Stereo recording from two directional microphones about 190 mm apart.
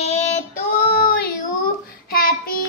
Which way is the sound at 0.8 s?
50° left (ahead or behind).